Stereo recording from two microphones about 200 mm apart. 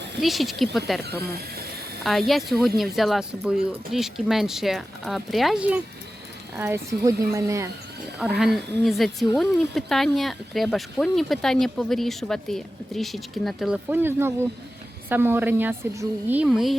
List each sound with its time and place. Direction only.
0.2 s speech: centre (ahead or behind)
1.2 s speech: 50° right (ahead or behind)
2.0 s a woman's voice: centre (ahead or behind); by 7.7 s 15° right (ahead or behind)
8.2 s a woman's voice: 5° right (ahead or behind)